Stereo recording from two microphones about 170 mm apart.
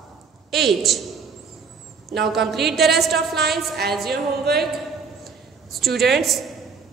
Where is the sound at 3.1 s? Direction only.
70° right (ahead or behind).